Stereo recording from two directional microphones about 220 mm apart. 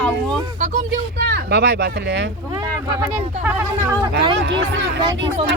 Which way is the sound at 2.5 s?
15° right (ahead or behind).